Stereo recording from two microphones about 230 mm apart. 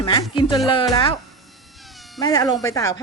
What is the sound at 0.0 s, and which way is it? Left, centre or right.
Speech, centre.